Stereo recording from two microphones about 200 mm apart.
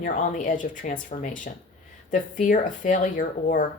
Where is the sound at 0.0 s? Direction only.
40° left (ahead or behind).